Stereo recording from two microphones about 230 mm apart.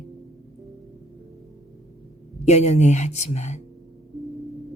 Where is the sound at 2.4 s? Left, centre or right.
Left.